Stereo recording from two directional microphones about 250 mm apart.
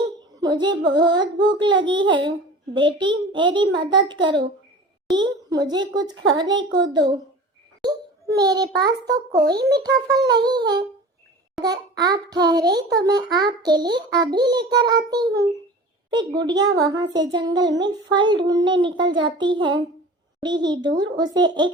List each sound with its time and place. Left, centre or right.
0.3 s a child's voice: centre
8.4 s a child's voice: centre